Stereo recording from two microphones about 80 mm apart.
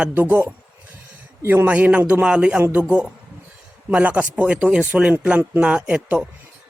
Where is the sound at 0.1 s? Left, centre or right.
Right.